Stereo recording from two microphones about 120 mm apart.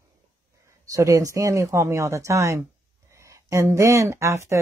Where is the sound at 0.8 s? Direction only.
30° right (ahead or behind).